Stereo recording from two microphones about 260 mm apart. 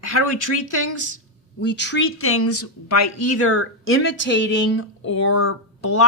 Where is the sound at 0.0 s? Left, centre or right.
Left.